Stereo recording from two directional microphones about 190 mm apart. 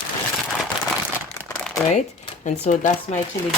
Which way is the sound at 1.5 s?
5° left (ahead or behind).